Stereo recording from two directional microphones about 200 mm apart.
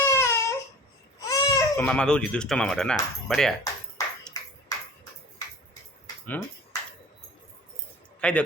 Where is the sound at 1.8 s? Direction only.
5° left (ahead or behind).